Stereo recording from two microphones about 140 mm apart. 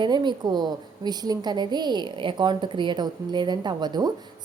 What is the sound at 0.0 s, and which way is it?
A woman's voice, 35° right (ahead or behind).